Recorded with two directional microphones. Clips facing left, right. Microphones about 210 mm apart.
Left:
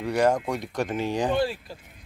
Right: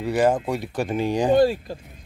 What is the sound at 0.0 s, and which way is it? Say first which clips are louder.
Speech: right 2 dB; 5° right (ahead or behind).